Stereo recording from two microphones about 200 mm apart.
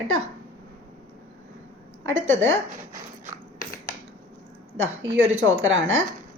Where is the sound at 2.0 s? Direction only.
75° right (ahead or behind).